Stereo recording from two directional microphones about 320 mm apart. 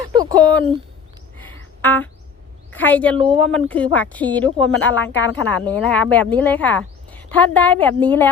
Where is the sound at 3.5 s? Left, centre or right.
Centre.